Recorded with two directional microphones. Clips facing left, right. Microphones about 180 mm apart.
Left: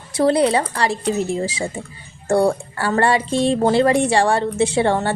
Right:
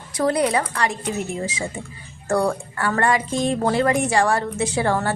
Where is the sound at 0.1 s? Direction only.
30° left (ahead or behind).